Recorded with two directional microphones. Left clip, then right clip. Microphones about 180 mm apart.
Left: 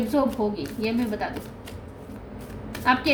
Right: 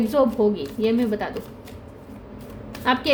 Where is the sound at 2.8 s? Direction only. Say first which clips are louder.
Even; 50° right (ahead or behind).